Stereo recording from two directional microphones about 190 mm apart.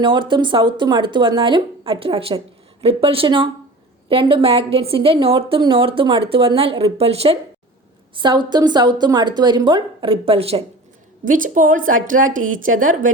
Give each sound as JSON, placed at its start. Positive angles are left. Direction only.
{"t": 0.0, "sound": "a woman's voice", "side_deg": -25}
{"t": 11.3, "sound": "a woman's voice", "side_deg": -45}